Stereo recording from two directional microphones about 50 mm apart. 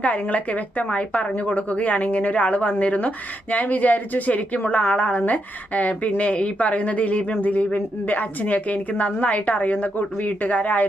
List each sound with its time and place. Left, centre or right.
0.0 s a woman's voice: left